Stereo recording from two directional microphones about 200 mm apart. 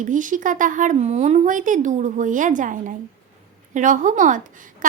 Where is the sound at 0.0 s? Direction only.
40° right (ahead or behind).